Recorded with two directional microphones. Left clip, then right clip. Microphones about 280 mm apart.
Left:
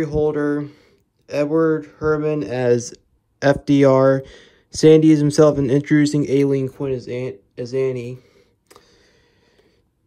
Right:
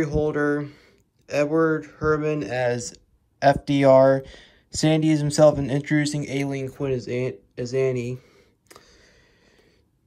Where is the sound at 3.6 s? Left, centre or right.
Left.